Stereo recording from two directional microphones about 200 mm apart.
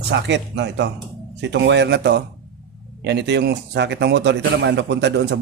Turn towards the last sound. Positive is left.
turn(degrees=-60)  # may be behind; listen again after turning